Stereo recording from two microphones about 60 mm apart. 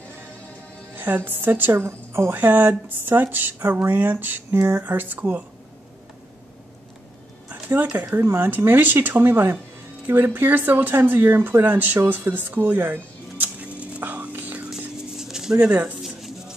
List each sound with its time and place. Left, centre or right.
0.9 s speech: right
1.7 s a woman's voice: right
2.3 s speech: right
7.9 s speech: right
8.2 s a woman's voice: right
8.5 s speech: right
13.7 s whispering: right
15.0 s a sound: centre
15.6 s speech: right
16.2 s music: centre